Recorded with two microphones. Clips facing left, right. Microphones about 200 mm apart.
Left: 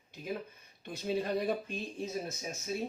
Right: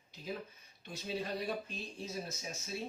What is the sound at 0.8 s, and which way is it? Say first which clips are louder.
Speech: left 6 dB; 55° left (ahead or behind).